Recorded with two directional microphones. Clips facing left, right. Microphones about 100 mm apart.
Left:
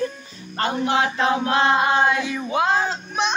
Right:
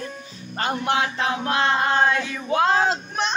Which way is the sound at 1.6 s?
15° left (ahead or behind).